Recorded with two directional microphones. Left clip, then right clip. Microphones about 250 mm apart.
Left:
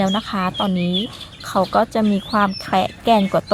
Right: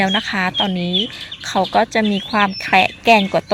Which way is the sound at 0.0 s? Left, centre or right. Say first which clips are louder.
Right 3 dB; centre.